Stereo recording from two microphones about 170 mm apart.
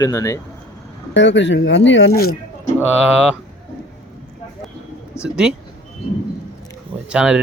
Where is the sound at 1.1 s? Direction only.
90° left; by 2.3 s 65° left (ahead or behind).